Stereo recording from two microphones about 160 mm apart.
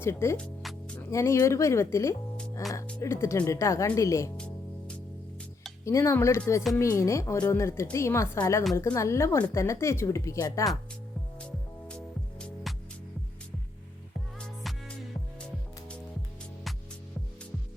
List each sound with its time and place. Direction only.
0.0 s music: 15° left (ahead or behind)
0.9 s a woman's voice: 15° left (ahead or behind)
5.8 s a woman's voice: 20° left (ahead or behind)
11.9 s music: 5° left (ahead or behind)
14.3 s music: 5° left (ahead or behind)